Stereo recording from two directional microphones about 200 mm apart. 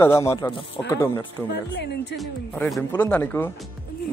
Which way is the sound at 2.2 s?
Centre (ahead or behind).